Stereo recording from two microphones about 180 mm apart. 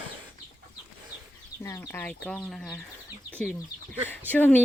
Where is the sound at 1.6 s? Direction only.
15° left (ahead or behind).